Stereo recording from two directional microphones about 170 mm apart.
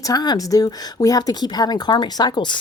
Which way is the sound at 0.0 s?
20° left (ahead or behind).